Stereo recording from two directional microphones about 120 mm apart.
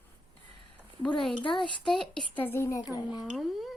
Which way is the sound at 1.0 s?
5° left (ahead or behind).